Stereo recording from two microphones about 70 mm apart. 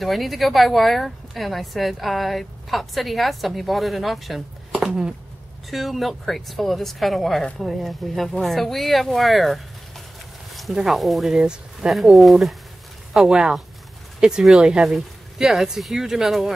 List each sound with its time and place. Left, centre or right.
0.0 s a woman's voice: centre
5.7 s a woman's voice: centre